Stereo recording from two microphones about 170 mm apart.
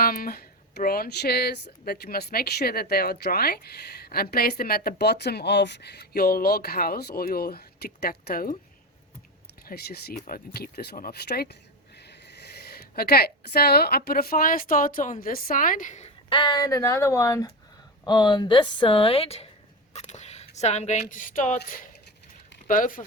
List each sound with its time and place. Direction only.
0.0 s speech: 60° left (ahead or behind)
9.6 s a woman's voice: 65° left (ahead or behind); by 16.1 s 45° left (ahead or behind)
16.3 s speech: 25° left (ahead or behind)
19.9 s a sound: 40° left (ahead or behind)
21.1 s speech: 50° left (ahead or behind)